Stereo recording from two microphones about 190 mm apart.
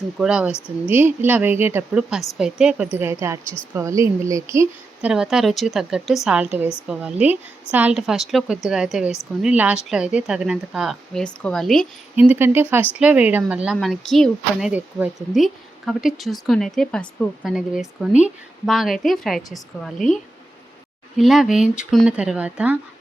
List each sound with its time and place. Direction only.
0.2 s a woman's voice: 5° right (ahead or behind)
5.1 s a woman's voice: 5° right (ahead or behind)
12.1 s a woman's voice: 10° right (ahead or behind)
21.2 s a woman's voice: centre (ahead or behind)